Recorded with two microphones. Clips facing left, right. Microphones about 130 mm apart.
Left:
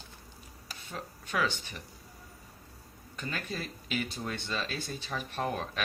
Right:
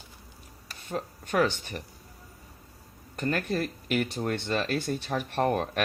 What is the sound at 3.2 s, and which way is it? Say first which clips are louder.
Speech: right 9 dB; 55° right (ahead or behind).